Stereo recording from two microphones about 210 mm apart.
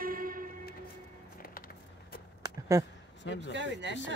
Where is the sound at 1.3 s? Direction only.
45° left (ahead or behind).